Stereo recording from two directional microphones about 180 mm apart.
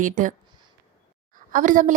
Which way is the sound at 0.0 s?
45° right (ahead or behind).